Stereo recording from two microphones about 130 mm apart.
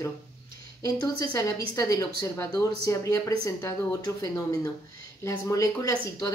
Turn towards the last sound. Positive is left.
turn(degrees=25)  # may be behind; listen again after turning